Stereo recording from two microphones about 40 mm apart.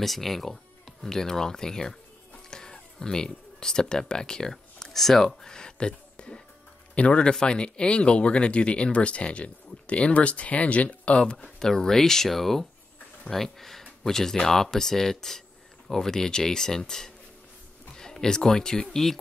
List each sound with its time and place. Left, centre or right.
0.0 s speech: centre
2.5 s a sound: centre
3.9 s speech: centre
11.3 s speech: centre